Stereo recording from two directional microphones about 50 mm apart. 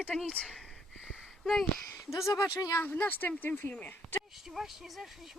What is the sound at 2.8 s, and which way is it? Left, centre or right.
Speech, left.